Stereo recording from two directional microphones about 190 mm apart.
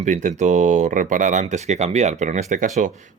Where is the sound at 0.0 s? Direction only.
40° right (ahead or behind).